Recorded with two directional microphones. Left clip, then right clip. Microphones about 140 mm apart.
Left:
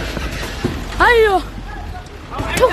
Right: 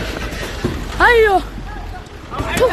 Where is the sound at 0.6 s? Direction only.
Centre (ahead or behind).